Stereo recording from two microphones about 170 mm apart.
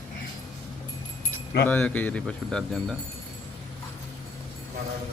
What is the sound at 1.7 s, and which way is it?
A man's voice, 10° left (ahead or behind).